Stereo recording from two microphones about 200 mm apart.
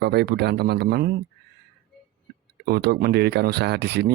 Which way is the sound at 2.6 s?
50° right (ahead or behind).